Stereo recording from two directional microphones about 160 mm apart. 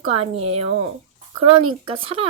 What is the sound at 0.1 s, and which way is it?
Speech, 40° right (ahead or behind).